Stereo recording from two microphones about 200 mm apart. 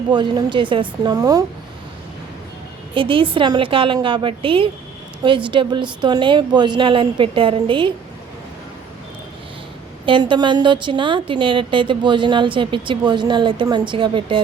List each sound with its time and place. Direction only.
0.1 s a woman's voice: 20° right (ahead or behind)
2.9 s a woman's voice: 25° right (ahead or behind)
10.1 s a woman's voice: 25° right (ahead or behind)